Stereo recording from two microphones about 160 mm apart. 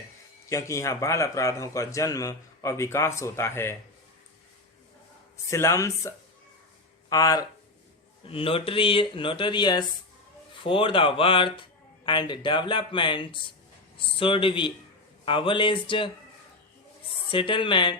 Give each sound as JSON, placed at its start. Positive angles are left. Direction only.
{"t": 0.4, "sound": "a man's voice", "side_deg": 20}
{"t": 5.5, "sound": "a man's voice", "side_deg": 20}
{"t": 8.3, "sound": "a man's voice", "side_deg": 35}
{"t": 17.2, "sound": "speech", "side_deg": 30}